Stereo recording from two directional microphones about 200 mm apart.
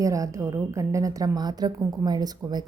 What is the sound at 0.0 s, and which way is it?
A woman's voice, 15° right (ahead or behind).